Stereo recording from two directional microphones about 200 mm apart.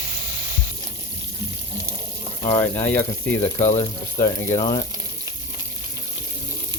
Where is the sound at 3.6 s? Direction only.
35° left (ahead or behind).